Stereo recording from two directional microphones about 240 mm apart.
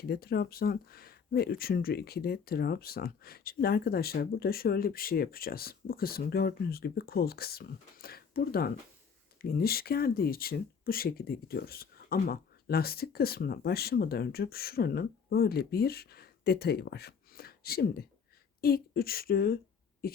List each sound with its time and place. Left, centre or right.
0.0 s speech: left